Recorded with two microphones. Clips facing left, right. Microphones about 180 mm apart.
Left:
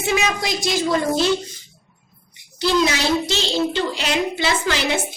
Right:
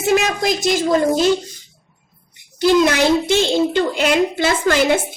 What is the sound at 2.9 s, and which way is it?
A child's voice, 55° right (ahead or behind).